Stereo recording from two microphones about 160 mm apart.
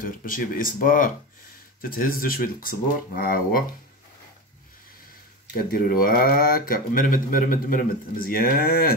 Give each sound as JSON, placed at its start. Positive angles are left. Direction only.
{"t": 0.0, "sound": "speech", "side_deg": 60}
{"t": 5.6, "sound": "speech", "side_deg": 65}